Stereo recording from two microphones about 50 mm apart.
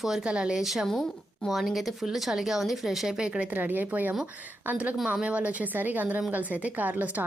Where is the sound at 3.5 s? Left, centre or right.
Right.